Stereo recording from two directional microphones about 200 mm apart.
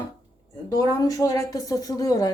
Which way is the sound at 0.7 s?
15° left (ahead or behind).